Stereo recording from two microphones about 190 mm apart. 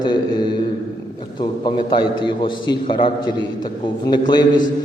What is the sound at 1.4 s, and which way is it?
A man's voice, 25° left (ahead or behind).